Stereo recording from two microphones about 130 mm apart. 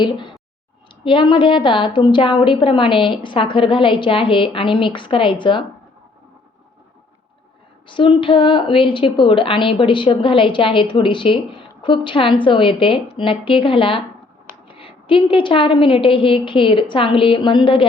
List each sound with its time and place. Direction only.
0.0 s a woman's voice: 40° left (ahead or behind)
7.9 s a woman's voice: 40° left (ahead or behind)